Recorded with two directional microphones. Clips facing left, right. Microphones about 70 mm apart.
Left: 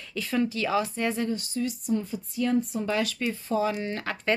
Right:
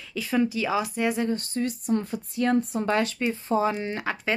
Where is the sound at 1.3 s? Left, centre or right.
Right.